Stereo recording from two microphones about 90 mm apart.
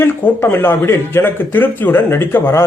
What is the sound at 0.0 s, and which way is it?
A man's voice, 25° left (ahead or behind).